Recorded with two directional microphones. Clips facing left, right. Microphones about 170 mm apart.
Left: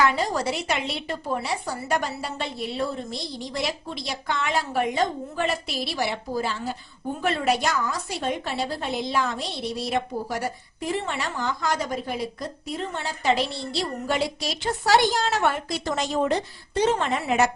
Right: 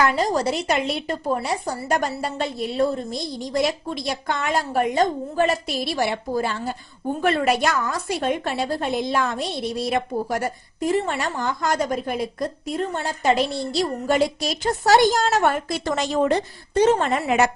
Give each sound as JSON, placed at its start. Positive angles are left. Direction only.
{"t": 0.0, "sound": "a woman's voice", "side_deg": -40}
{"t": 16.0, "sound": "a woman's voice", "side_deg": -80}
{"t": 16.7, "sound": "a woman's voice", "side_deg": -45}